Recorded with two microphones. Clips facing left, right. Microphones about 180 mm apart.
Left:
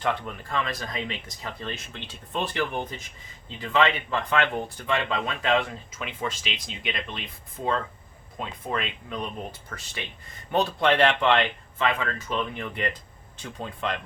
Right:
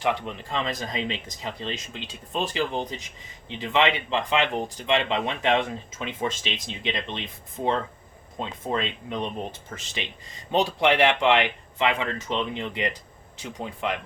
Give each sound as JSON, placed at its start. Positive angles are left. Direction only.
{"t": 0.0, "sound": "speech", "side_deg": -20}